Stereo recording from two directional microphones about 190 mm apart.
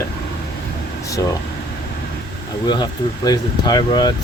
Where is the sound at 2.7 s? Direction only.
20° left (ahead or behind).